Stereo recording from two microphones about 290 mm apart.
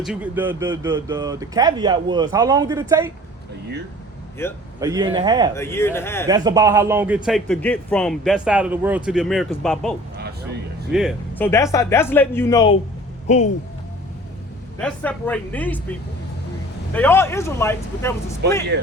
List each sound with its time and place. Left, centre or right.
0.0 s a man's voice: centre
4.4 s speech: centre
4.8 s a man's voice: centre
5.5 s speech: centre
6.2 s a man's voice: centre
10.9 s speech: centre
13.2 s speech: left
14.8 s speech: centre